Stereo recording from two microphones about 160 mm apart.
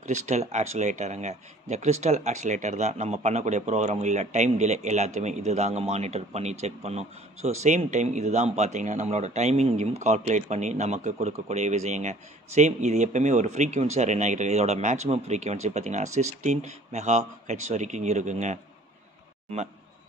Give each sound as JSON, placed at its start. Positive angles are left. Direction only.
{"t": 0.0, "sound": "speech", "side_deg": -45}